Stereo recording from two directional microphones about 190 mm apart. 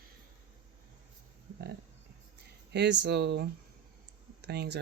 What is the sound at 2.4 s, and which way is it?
Speech, 65° right (ahead or behind).